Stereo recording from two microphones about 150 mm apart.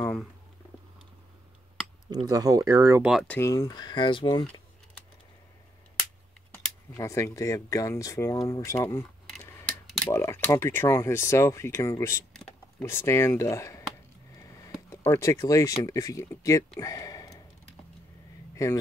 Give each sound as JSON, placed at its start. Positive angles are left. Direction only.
{"t": 2.0, "sound": "speech", "side_deg": -25}
{"t": 3.0, "sound": "speech", "side_deg": -5}
{"t": 3.3, "sound": "speech", "side_deg": 15}
{"t": 7.0, "sound": "speech", "side_deg": 20}
{"t": 16.8, "sound": "a sound", "side_deg": 25}
{"t": 18.5, "sound": "a sound", "side_deg": 20}